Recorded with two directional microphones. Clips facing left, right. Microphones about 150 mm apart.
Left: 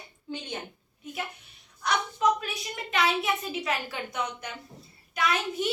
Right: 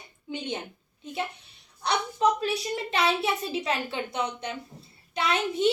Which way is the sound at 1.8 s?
30° right (ahead or behind).